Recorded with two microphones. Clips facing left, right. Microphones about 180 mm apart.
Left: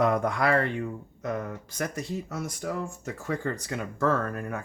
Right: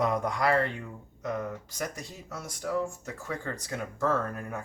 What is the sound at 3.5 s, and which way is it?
Speech, 65° left (ahead or behind).